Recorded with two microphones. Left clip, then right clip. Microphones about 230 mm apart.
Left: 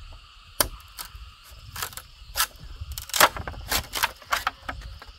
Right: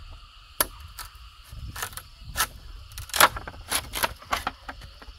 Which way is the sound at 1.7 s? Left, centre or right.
Centre.